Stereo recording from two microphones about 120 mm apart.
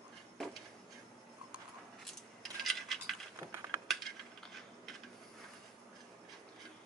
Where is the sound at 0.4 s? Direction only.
Centre (ahead or behind).